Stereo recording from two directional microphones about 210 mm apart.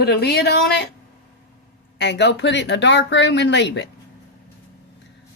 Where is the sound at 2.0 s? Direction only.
55° left (ahead or behind).